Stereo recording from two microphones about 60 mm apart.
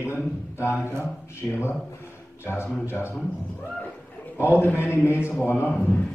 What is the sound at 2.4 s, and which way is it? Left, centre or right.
Speech, left.